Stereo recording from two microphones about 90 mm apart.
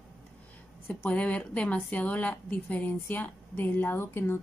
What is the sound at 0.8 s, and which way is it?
A woman's voice, 20° left (ahead or behind).